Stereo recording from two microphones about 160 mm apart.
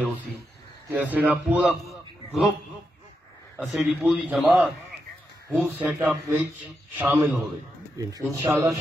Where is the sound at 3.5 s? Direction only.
5° right (ahead or behind).